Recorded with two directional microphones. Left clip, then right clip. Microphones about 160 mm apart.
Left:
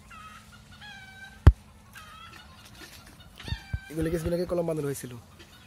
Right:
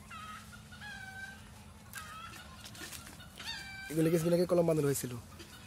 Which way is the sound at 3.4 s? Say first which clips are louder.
Left 1 dB; 90° right.